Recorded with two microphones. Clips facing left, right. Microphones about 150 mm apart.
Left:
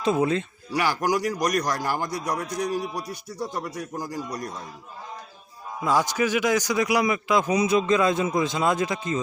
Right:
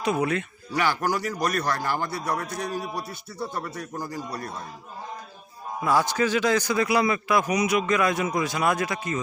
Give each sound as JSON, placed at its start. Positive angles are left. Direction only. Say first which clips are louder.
{"t": 0.0, "sound": "a man's voice", "louder": "left 2 dB", "side_deg": 25}
{"t": 0.7, "sound": "a man's voice", "louder": "left 1 dB", "side_deg": 10}
{"t": 5.8, "sound": "a man's voice", "louder": "even", "side_deg": 15}